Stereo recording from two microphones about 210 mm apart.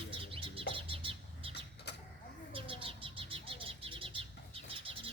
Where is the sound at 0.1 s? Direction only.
25° right (ahead or behind).